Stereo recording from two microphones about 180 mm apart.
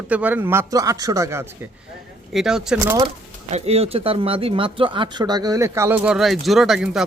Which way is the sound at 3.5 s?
35° right (ahead or behind).